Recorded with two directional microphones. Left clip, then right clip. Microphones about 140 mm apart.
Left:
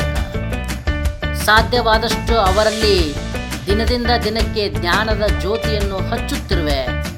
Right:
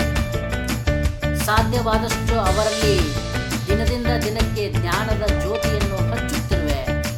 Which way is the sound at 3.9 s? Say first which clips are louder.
Left 6 dB; 30° left (ahead or behind).